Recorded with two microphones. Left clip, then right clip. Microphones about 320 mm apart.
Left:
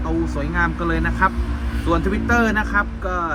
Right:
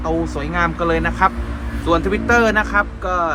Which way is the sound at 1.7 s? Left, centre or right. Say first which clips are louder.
Right 4 dB; centre.